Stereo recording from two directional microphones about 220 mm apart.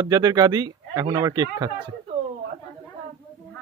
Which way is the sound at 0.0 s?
20° right (ahead or behind).